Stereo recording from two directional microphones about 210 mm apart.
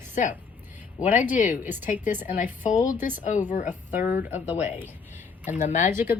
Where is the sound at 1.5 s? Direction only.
10° right (ahead or behind).